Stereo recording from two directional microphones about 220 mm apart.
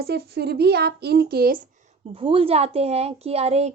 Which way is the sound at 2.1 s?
25° right (ahead or behind).